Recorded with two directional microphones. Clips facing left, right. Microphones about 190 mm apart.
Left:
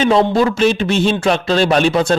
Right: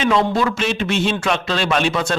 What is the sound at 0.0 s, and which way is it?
Speech, 35° left (ahead or behind).